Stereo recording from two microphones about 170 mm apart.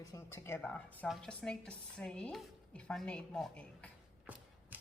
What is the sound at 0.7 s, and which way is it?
Speech, 5° left (ahead or behind).